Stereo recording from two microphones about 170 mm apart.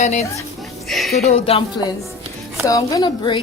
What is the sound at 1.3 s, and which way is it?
Speech, 35° left (ahead or behind).